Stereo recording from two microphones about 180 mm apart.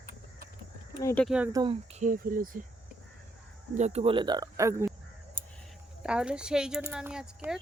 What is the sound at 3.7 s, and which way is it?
Speech, 35° right (ahead or behind).